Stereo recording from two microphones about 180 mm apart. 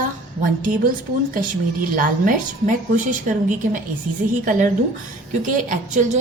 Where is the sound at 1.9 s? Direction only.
50° right (ahead or behind).